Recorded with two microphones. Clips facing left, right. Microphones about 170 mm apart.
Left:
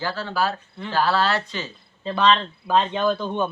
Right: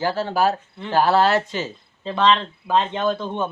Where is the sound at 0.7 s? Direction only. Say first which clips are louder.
Right 2 dB; 20° right (ahead or behind).